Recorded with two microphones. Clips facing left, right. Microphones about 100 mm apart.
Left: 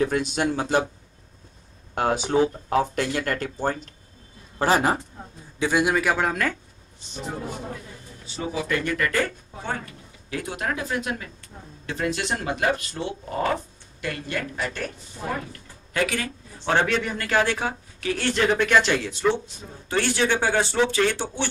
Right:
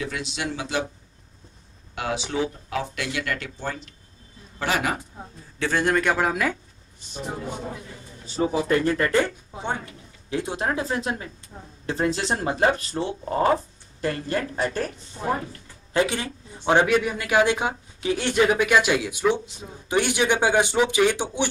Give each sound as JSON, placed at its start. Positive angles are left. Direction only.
{"t": 0.0, "sound": "speech", "side_deg": 45}
{"t": 2.0, "sound": "a man's voice", "side_deg": 45}
{"t": 5.6, "sound": "speech", "side_deg": 15}
{"t": 8.3, "sound": "a man's voice", "side_deg": -35}